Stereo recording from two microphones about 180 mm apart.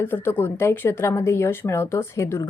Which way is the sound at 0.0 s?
10° left (ahead or behind).